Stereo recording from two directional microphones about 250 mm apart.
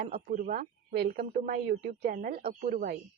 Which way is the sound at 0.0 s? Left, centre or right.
Right.